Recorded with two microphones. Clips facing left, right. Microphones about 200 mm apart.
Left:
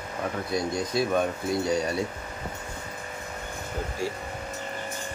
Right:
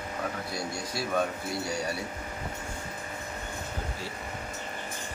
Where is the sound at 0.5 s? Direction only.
20° left (ahead or behind).